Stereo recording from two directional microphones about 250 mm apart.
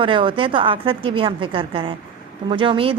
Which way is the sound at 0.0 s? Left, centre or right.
Centre.